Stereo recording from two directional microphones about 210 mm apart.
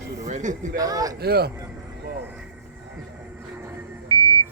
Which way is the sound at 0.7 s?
15° right (ahead or behind).